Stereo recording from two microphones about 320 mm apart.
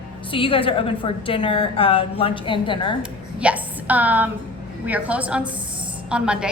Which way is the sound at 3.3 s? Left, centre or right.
Centre.